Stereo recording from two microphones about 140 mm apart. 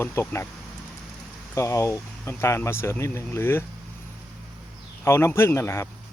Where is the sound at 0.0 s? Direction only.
20° left (ahead or behind).